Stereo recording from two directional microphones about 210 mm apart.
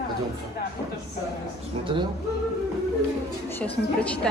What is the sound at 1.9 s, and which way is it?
Speech, 25° right (ahead or behind).